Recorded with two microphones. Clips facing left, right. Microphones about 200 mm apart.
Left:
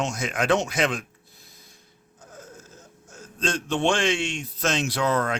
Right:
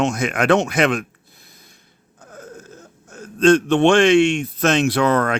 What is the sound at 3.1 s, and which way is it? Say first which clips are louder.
A man's voice: right 15 dB; 60° right (ahead or behind).